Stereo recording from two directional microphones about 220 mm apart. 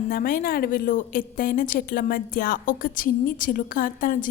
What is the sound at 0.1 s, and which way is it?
A woman's voice, 40° left (ahead or behind).